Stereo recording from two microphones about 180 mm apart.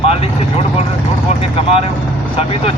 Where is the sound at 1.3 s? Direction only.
35° left (ahead or behind).